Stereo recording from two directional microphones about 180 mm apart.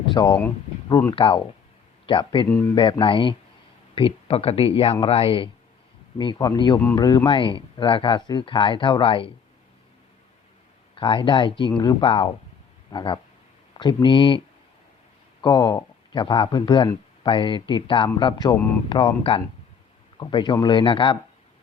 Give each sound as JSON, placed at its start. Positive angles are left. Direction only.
{"t": 0.0, "sound": "speech", "side_deg": 25}
{"t": 10.9, "sound": "speech", "side_deg": 30}